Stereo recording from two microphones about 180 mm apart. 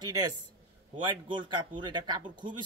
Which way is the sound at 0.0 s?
25° right (ahead or behind).